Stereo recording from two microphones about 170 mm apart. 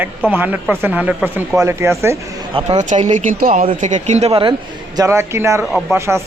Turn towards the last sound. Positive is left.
turn(degrees=-15)  # may be behind; listen again after turning